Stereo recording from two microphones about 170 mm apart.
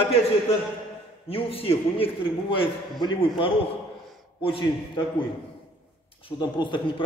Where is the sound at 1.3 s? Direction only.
35° left (ahead or behind).